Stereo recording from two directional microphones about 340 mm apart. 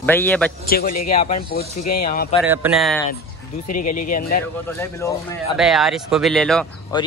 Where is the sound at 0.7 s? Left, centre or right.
Left.